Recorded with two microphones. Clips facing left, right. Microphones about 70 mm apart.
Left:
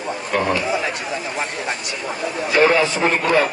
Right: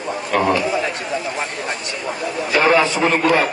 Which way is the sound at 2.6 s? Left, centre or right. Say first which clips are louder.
Right 1 dB; right.